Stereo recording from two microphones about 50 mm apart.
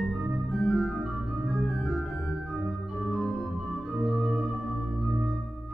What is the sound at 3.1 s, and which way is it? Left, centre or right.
Organ, centre.